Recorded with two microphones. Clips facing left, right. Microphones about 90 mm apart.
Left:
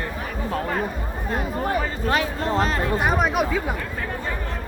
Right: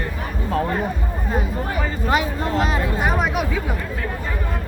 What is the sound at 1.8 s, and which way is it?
Speech, 5° right (ahead or behind).